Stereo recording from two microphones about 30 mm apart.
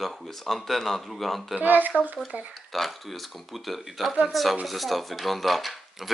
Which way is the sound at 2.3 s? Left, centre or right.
Right.